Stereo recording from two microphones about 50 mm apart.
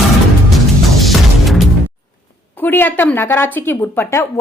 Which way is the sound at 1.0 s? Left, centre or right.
Centre.